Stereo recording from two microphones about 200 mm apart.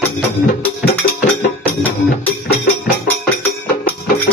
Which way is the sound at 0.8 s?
50° left (ahead or behind).